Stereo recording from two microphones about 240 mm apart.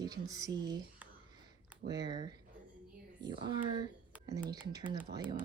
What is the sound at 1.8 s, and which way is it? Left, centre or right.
Speech, centre.